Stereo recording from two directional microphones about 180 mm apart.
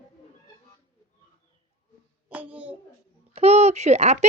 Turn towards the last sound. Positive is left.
turn(degrees=-40)  # may be behind; listen again after turning